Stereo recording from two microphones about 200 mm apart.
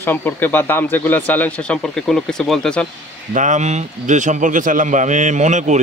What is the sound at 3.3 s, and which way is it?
Speech, 40° right (ahead or behind).